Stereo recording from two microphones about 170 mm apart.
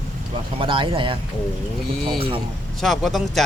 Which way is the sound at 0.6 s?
30° right (ahead or behind).